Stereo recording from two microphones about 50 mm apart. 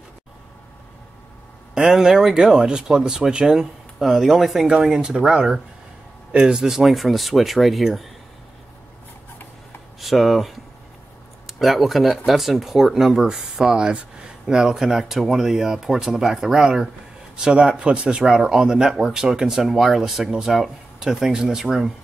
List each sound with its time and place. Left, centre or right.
1.8 s speech: centre
9.9 s speech: centre
19.7 s speech: centre
20.0 s speech: centre